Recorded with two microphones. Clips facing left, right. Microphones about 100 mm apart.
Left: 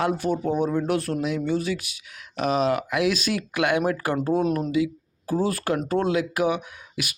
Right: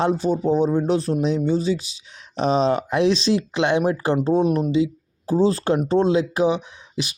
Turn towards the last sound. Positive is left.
turn(degrees=-25)  # may be behind; listen again after turning